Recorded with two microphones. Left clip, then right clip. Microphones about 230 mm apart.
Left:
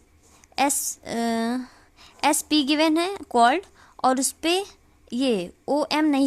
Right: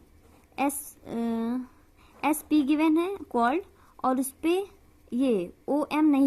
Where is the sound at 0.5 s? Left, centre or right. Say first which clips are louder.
Left 6 dB; left.